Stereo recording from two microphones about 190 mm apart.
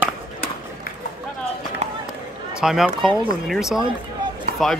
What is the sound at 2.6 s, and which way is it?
Speech, centre (ahead or behind).